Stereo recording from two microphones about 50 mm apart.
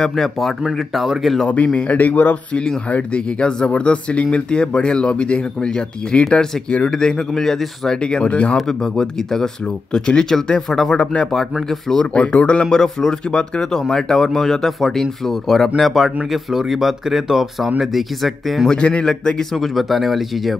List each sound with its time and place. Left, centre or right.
0.0 s speech: centre
1.5 s speech: left
2.9 s speech: left
6.9 s speech: centre
8.0 s speech: centre
8.5 s speech: centre
12.0 s speech: left; by 18.7 s centre
18.7 s speech: centre
19.5 s speech: centre